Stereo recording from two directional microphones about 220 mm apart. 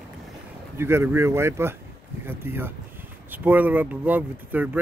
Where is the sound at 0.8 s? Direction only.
10° right (ahead or behind).